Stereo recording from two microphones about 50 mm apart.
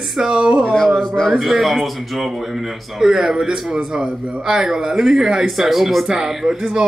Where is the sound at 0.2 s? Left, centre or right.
Centre.